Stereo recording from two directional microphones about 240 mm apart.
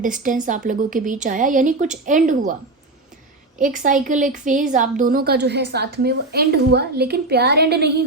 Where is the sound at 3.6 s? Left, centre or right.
Right.